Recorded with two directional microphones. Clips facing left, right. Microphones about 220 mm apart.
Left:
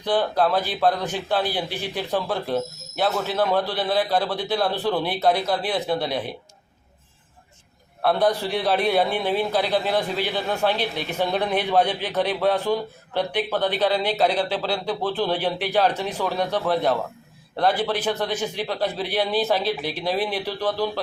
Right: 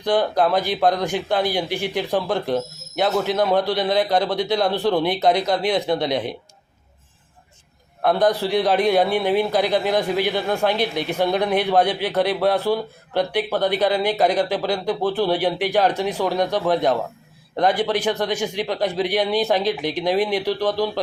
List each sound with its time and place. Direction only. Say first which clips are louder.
0.0 s speech: right 2 dB; 15° right (ahead or behind)
8.4 s speech: right 4 dB; 15° right (ahead or behind)